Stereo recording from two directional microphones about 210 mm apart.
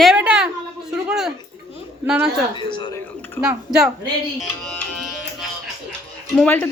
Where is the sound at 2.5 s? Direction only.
25° left (ahead or behind).